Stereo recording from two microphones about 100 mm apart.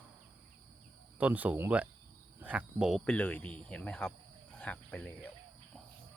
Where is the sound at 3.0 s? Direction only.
15° left (ahead or behind).